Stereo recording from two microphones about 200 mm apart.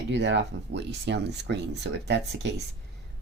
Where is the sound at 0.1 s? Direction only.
60° right (ahead or behind).